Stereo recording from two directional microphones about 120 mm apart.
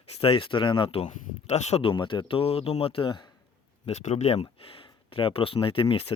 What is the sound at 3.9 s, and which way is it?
Speech, 70° left (ahead or behind).